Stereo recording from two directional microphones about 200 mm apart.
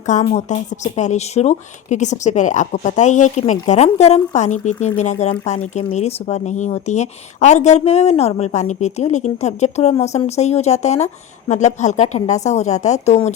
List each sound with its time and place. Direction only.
0.0 s a woman's voice: 35° left (ahead or behind)